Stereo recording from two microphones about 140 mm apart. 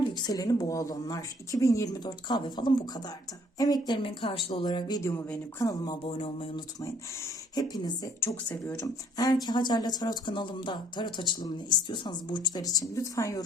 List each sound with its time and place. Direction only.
0.0 s speech: 30° left (ahead or behind)
6.1 s speech: 45° left (ahead or behind)
6.8 s speech: 25° left (ahead or behind)
9.1 s speech: 30° left (ahead or behind)